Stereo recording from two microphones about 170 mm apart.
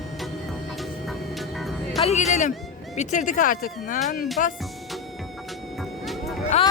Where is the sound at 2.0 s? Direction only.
40° left (ahead or behind).